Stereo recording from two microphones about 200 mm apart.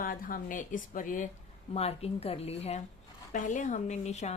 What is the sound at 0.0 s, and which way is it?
A woman's voice, 45° left (ahead or behind).